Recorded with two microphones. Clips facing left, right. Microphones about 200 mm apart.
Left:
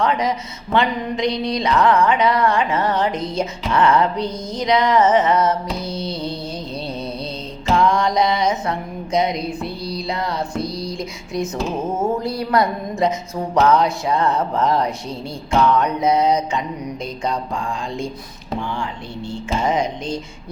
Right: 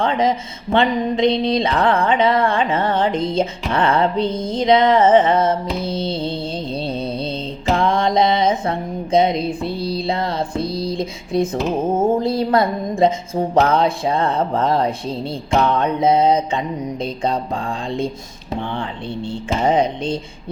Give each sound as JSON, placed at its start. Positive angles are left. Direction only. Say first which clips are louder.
{"t": 0.0, "sound": "music", "louder": "right 2 dB", "side_deg": -30}
{"t": 1.8, "sound": "speech", "louder": "left 4 dB", "side_deg": -55}
{"t": 2.0, "sound": "music", "louder": "right 1 dB", "side_deg": -25}
{"t": 4.3, "sound": "speech", "louder": "right 5 dB", "side_deg": -55}
{"t": 4.5, "sound": "music", "louder": "right 3 dB", "side_deg": -25}
{"t": 6.8, "sound": "mantra", "louder": "right 4 dB", "side_deg": -30}
{"t": 7.7, "sound": "music", "louder": "left 1 dB", "side_deg": -55}
{"t": 7.9, "sound": "a sound", "louder": "right 2 dB", "side_deg": -25}
{"t": 9.6, "sound": "music", "louder": "right 4 dB", "side_deg": -30}
{"t": 12.0, "sound": "music", "louder": "right 4 dB", "side_deg": -30}
{"t": 19.7, "sound": "speech", "louder": "right 4 dB", "side_deg": -60}